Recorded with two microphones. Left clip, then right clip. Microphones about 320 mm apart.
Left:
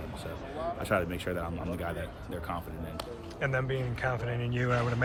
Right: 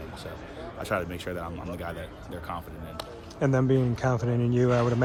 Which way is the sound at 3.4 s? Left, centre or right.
Centre.